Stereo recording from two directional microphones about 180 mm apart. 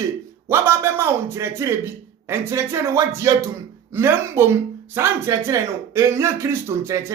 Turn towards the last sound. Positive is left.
turn(degrees=-15)  # may be behind; listen again after turning